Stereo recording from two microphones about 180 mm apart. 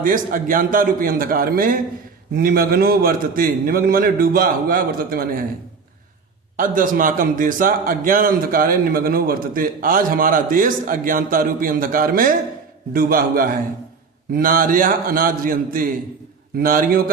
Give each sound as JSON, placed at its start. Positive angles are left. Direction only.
{"t": 0.0, "sound": "a man's voice", "side_deg": -50}
{"t": 6.6, "sound": "a man's voice", "side_deg": -50}